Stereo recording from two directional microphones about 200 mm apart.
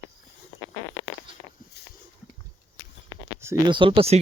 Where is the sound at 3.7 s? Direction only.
25° right (ahead or behind).